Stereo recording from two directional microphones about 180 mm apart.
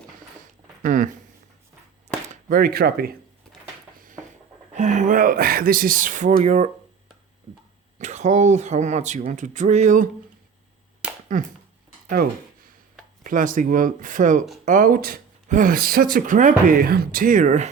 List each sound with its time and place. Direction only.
0.8 s speech: 45° right (ahead or behind)
2.3 s speech: 55° right (ahead or behind)
4.7 s speech: 40° right (ahead or behind)
7.9 s speech: 40° right (ahead or behind)
11.3 s speech: 45° right (ahead or behind)